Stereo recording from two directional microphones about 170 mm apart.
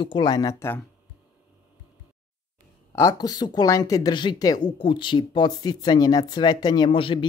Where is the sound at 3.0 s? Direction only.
20° left (ahead or behind).